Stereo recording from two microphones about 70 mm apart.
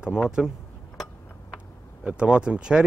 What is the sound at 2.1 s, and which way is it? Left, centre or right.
Speech, centre.